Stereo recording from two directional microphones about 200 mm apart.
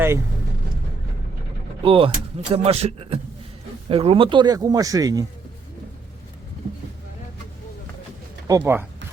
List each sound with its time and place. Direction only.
1.8 s speech: 25° right (ahead or behind)
8.4 s speech: 15° right (ahead or behind)